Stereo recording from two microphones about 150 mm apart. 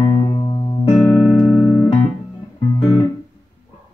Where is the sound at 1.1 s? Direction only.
5° left (ahead or behind).